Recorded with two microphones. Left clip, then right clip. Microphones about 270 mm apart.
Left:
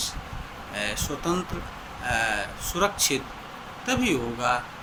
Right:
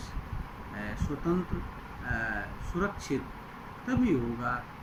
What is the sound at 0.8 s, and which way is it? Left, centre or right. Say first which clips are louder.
Speech: left 9 dB; left.